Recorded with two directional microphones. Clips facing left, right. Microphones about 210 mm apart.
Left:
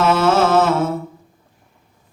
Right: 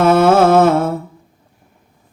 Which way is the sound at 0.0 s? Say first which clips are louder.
Right 5 dB; 55° right (ahead or behind).